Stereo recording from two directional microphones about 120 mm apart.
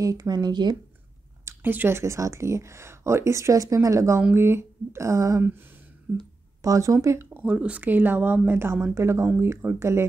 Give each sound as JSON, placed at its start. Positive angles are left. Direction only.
{"t": 0.0, "sound": "speech", "side_deg": -30}
{"t": 1.4, "sound": "speech", "side_deg": -15}
{"t": 6.1, "sound": "speech", "side_deg": -15}
{"t": 7.4, "sound": "speech", "side_deg": -10}